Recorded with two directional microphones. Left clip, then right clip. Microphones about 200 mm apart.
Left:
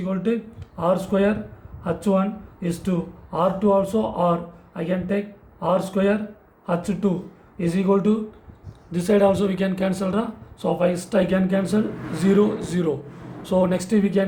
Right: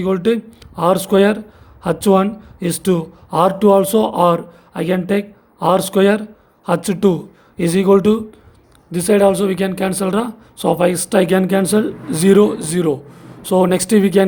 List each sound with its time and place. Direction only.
0.0 s speech: 55° right (ahead or behind)